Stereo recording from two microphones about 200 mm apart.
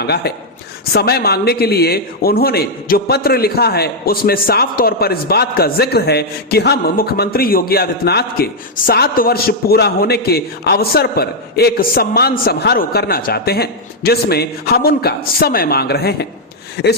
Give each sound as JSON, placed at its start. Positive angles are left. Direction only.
{"t": 0.0, "sound": "a man's voice", "side_deg": 55}